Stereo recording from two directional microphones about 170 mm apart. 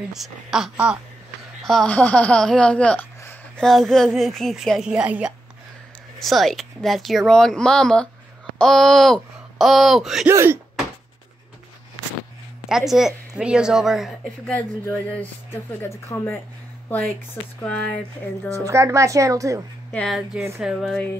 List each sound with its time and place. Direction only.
0.1 s speech: centre (ahead or behind)
10.2 s speech: 15° right (ahead or behind)
12.6 s speech: centre (ahead or behind)
14.5 s speech: 10° left (ahead or behind)
18.6 s speech: 20° right (ahead or behind)
19.9 s speech: 5° left (ahead or behind)